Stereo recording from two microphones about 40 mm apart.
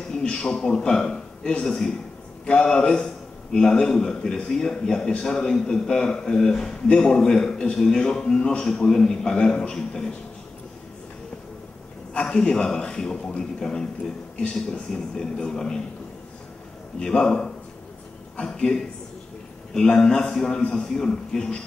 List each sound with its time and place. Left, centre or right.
0.1 s a man's voice: left
12.1 s a man's voice: centre
17.0 s a man's voice: centre